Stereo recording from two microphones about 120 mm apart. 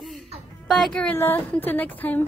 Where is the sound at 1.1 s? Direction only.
15° left (ahead or behind).